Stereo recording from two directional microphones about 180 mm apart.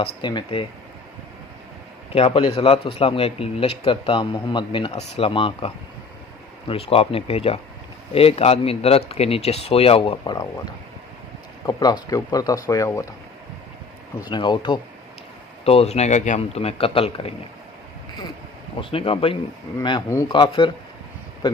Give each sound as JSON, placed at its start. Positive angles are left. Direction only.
{"t": 0.2, "sound": "speech", "side_deg": 25}
{"t": 2.1, "sound": "a man's voice", "side_deg": 35}
{"t": 14.3, "sound": "a man's voice", "side_deg": 25}
{"t": 18.8, "sound": "a man's voice", "side_deg": 30}